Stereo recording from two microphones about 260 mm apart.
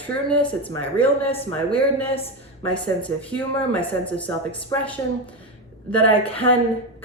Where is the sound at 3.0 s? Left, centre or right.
Centre.